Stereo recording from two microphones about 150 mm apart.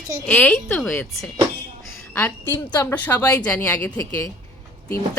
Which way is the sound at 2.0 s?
15° left (ahead or behind).